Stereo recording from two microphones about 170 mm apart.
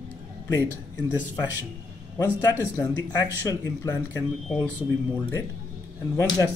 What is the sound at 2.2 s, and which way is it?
Speech, 15° left (ahead or behind).